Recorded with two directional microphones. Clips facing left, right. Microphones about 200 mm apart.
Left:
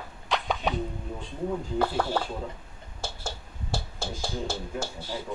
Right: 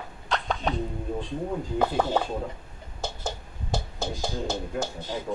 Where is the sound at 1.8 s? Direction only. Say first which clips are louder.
Right 3 dB; 20° right (ahead or behind).